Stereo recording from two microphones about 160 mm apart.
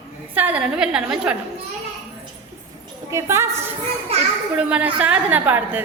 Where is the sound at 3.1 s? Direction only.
15° right (ahead or behind).